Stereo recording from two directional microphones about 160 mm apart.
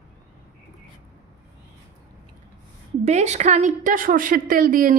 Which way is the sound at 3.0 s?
45° right (ahead or behind).